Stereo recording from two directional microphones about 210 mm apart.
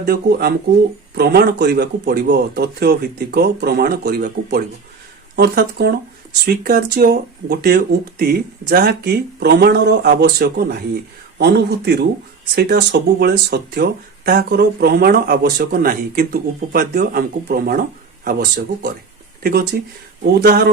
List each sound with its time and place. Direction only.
0.0 s speech: 50° right (ahead or behind)